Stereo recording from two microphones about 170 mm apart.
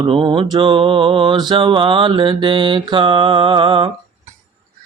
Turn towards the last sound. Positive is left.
turn(degrees=-30)  # may be behind; listen again after turning